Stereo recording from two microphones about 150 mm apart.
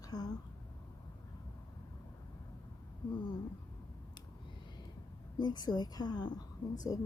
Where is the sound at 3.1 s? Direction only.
35° left (ahead or behind).